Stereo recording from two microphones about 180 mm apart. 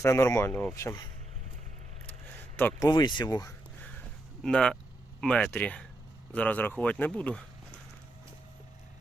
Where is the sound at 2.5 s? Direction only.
10° left (ahead or behind).